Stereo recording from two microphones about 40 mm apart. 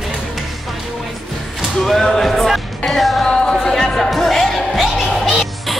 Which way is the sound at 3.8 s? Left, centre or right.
Centre.